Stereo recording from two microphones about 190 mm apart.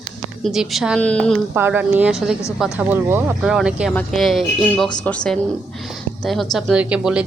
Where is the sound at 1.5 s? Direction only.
10° right (ahead or behind).